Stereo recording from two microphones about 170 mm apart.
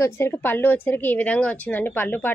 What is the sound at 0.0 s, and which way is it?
Speech, 15° left (ahead or behind).